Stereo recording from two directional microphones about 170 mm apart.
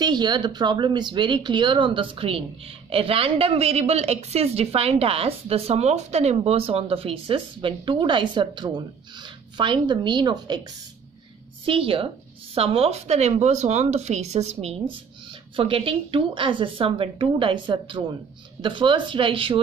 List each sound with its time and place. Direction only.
0.0 s speech: 25° right (ahead or behind)
11.6 s speech: 30° right (ahead or behind)